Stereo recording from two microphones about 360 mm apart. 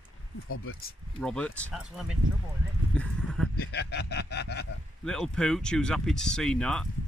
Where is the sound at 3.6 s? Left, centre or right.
Left.